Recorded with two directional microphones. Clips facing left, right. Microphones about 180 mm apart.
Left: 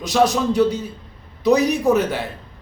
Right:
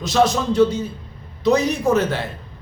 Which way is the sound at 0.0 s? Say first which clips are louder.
Even; 15° left (ahead or behind).